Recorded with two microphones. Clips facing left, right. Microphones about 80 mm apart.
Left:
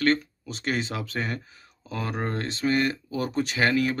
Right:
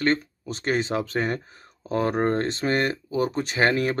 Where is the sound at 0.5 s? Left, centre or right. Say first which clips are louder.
Right 4 dB; right.